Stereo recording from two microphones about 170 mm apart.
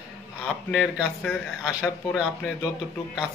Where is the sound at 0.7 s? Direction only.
Centre (ahead or behind).